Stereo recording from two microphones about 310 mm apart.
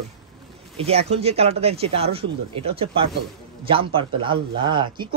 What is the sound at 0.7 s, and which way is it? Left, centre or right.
Speech, centre.